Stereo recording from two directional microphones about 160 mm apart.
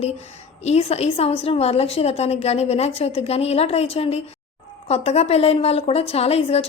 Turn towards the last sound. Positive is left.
turn(degrees=40)  # may be behind; listen again after turning